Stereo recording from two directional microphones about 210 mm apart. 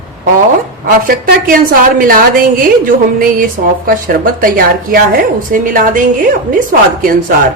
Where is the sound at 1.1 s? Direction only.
40° right (ahead or behind).